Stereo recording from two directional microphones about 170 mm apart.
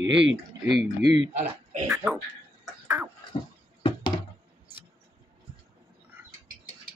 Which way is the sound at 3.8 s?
25° left (ahead or behind).